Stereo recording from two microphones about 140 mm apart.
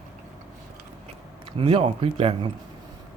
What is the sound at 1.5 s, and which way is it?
Speech, 40° right (ahead or behind).